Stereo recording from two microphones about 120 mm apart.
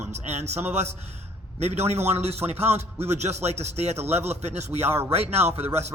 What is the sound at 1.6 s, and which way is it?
A man's voice, 65° right (ahead or behind).